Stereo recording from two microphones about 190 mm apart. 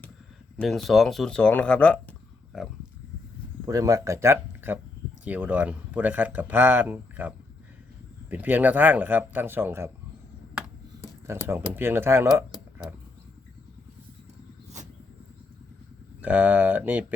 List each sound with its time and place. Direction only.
0.6 s speech: centre (ahead or behind)
3.7 s speech: 15° right (ahead or behind)
11.3 s speech: 15° right (ahead or behind)
16.2 s speech: 10° right (ahead or behind)